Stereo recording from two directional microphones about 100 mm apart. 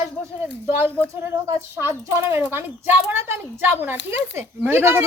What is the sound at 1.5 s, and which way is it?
A woman's voice, 25° right (ahead or behind).